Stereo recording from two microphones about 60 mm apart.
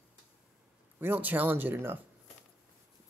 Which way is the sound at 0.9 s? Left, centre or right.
Right.